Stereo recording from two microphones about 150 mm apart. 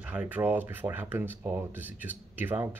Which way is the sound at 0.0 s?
10° right (ahead or behind).